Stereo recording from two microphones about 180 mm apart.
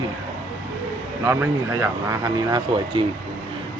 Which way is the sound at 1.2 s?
15° right (ahead or behind).